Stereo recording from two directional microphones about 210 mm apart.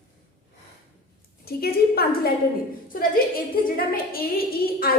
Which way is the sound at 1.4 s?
45° left (ahead or behind).